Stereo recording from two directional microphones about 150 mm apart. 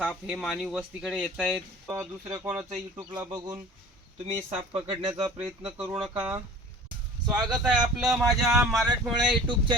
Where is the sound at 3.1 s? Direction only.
30° right (ahead or behind).